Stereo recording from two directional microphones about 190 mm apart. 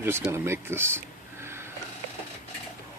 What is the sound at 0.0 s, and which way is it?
Speech, 10° right (ahead or behind).